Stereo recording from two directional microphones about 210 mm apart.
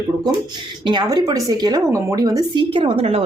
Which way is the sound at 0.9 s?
20° right (ahead or behind).